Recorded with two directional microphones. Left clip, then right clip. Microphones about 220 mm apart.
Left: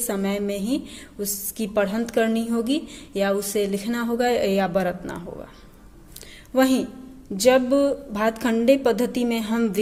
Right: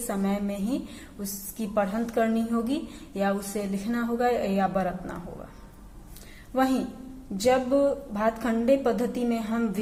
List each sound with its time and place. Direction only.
0.1 s a woman's voice: 40° left (ahead or behind)
6.5 s a woman's voice: 40° left (ahead or behind)